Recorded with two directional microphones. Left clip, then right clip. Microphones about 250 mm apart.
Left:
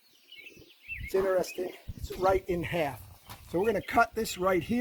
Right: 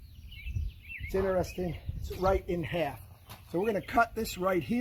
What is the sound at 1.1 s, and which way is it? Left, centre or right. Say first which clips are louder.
Speech: left 2 dB; left.